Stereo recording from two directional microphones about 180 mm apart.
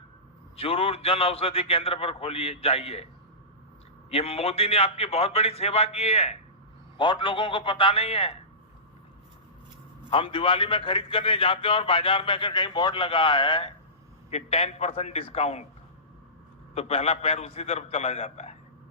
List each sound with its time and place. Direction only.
0.5 s a man's voice: 30° left (ahead or behind)
4.1 s a man's voice: 35° left (ahead or behind)
10.1 s a man's voice: 30° left (ahead or behind)
16.7 s a man's voice: 35° left (ahead or behind)